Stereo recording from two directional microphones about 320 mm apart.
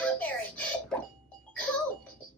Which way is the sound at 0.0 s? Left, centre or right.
Centre.